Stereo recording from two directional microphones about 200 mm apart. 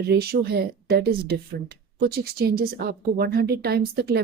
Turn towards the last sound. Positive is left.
turn(degrees=-50)  # may be behind; listen again after turning